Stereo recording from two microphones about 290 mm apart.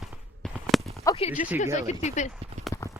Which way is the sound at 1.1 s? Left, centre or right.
Centre.